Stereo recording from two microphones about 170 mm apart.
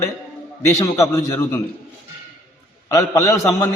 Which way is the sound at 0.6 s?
20° left (ahead or behind).